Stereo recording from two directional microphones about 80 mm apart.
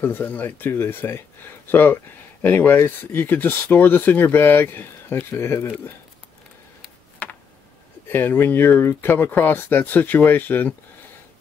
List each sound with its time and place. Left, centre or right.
0.0 s speech: left
7.2 s a sound: centre
8.1 s speech: left